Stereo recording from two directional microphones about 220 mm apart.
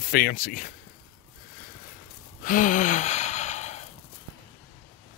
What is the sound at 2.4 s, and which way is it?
Gasp, 35° left (ahead or behind).